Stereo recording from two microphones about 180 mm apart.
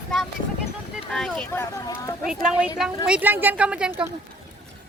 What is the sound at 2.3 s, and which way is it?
A woman's voice, 5° right (ahead or behind).